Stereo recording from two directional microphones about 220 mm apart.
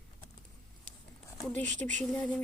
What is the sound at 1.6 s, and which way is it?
Speech, 35° right (ahead or behind).